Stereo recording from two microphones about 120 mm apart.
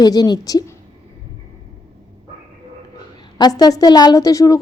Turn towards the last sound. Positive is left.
turn(degrees=30)  # may be behind; listen again after turning